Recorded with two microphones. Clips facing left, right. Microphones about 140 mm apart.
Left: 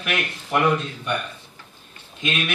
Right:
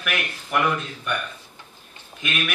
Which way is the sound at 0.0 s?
25° left (ahead or behind).